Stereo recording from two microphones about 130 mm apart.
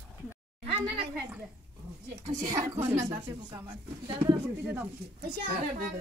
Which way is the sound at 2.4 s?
25° right (ahead or behind).